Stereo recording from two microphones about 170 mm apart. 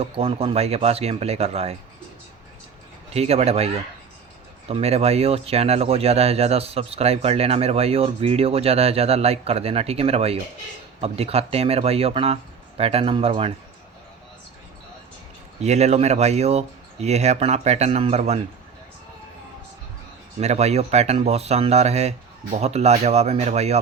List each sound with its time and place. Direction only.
0.0 s speech: 35° right (ahead or behind)
3.1 s speech: 35° right (ahead or behind)
4.7 s speech: 35° right (ahead or behind)
15.6 s speech: 40° right (ahead or behind)
20.4 s speech: 40° right (ahead or behind)